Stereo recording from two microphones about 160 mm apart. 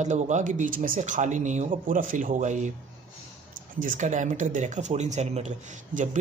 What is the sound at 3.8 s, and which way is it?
Speech, 50° right (ahead or behind).